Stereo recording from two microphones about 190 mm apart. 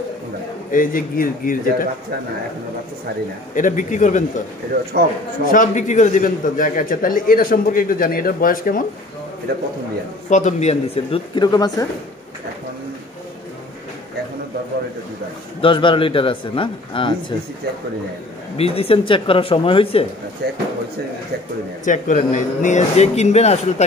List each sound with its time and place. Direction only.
0.7 s a man's voice: 45° left (ahead or behind)
3.5 s speech: 40° left (ahead or behind)
5.4 s a man's voice: 45° left (ahead or behind)
10.3 s speech: 35° left (ahead or behind); by 11.9 s 20° left (ahead or behind)
15.6 s speech: 25° left (ahead or behind)
18.6 s speech: 30° left (ahead or behind)
20.4 s speech: 60° right (ahead or behind)
21.8 s speech: 40° left (ahead or behind)